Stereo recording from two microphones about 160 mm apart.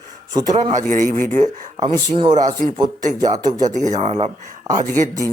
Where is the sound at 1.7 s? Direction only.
25° right (ahead or behind).